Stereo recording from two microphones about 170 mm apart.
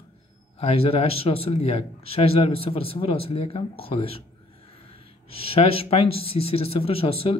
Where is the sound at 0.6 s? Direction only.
35° left (ahead or behind).